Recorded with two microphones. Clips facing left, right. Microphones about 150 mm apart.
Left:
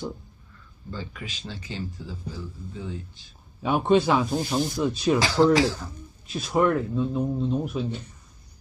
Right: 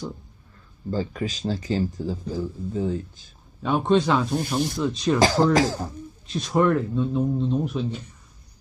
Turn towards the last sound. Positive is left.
turn(degrees=0)  # may be behind; listen again after turning